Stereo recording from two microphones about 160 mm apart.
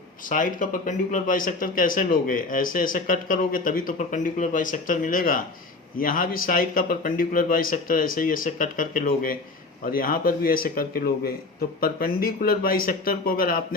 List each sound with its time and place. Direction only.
0.3 s speech: 55° left (ahead or behind)